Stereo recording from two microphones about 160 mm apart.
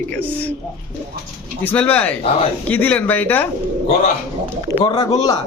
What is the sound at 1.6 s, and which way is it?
Speech, 10° left (ahead or behind).